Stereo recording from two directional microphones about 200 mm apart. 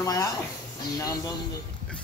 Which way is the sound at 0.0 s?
15° left (ahead or behind).